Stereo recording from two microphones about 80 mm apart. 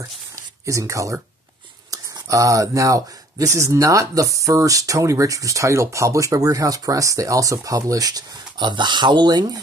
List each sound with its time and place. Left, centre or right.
0.7 s speech: right